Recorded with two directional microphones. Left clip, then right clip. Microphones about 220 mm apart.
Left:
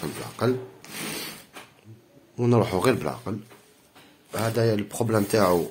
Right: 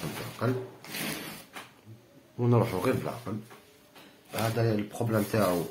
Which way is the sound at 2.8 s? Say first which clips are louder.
Left 6 dB; 55° left (ahead or behind).